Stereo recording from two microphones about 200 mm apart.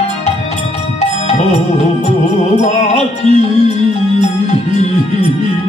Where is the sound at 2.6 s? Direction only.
35° left (ahead or behind).